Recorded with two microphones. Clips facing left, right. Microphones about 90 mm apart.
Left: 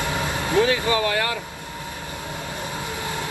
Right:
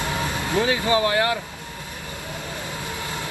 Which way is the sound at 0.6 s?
30° right (ahead or behind).